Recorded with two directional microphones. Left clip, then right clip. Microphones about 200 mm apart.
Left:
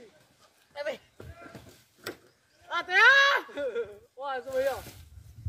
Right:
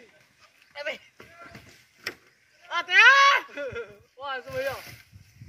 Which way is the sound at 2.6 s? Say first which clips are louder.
Right 4 dB; 45° left (ahead or behind).